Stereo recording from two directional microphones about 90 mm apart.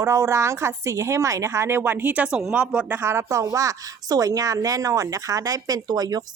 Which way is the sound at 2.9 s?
25° right (ahead or behind).